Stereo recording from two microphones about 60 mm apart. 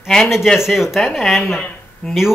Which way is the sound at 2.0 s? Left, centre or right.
Left.